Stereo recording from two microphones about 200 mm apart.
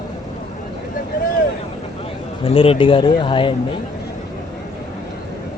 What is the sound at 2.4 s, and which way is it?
Speech, 30° left (ahead or behind).